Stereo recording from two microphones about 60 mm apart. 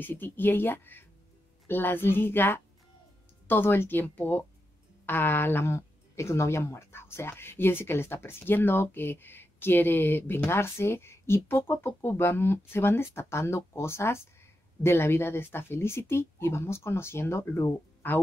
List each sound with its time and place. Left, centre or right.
0.0 s speech: left
5.7 s speech: left
18.0 s speech: left